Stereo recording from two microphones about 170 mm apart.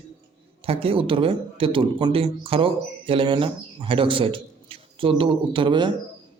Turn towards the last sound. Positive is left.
turn(degrees=-25)  # may be behind; listen again after turning